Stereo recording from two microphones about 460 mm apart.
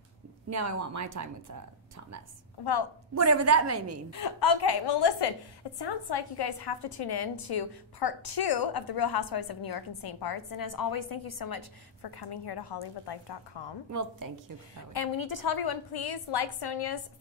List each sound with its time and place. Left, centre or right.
0.5 s a woman's voice: right
2.6 s a woman's voice: left
3.2 s a woman's voice: right
4.1 s a woman's voice: left
13.8 s a woman's voice: right
15.0 s a woman's voice: left